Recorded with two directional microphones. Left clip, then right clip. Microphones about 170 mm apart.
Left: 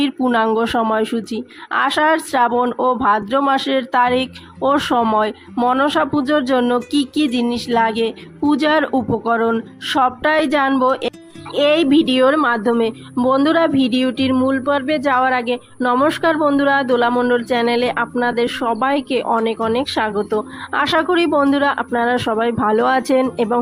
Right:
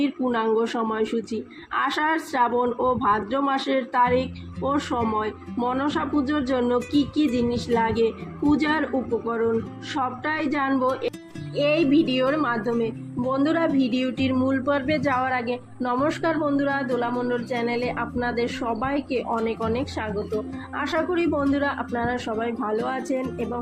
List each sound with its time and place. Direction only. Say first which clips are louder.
0.0 s a woman's voice: left 7 dB; 30° left (ahead or behind)